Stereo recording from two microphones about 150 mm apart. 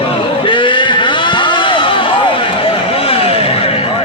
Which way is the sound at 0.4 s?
35° left (ahead or behind).